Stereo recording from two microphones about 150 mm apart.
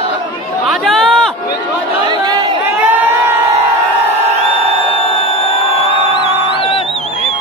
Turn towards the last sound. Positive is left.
turn(degrees=-45)  # may be behind; listen again after turning